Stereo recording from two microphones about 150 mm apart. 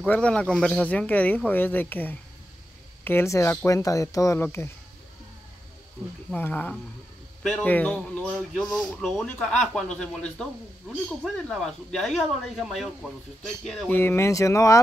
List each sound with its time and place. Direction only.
0.0 s speech: 10° left (ahead or behind)
6.3 s speech: 10° left (ahead or behind)
8.3 s speech: centre (ahead or behind)
13.8 s speech: 15° left (ahead or behind)